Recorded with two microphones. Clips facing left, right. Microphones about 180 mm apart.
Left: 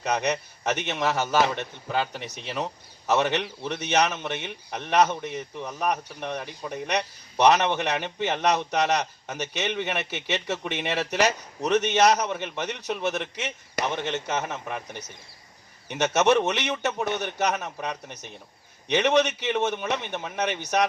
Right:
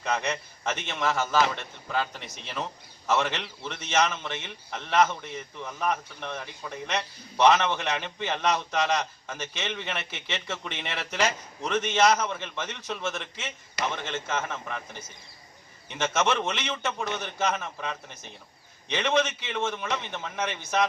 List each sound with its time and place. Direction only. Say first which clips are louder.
0.0 s a man's voice: left 3 dB; 20° left (ahead or behind)